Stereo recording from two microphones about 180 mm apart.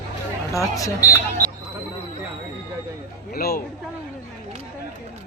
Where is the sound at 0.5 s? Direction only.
15° left (ahead or behind).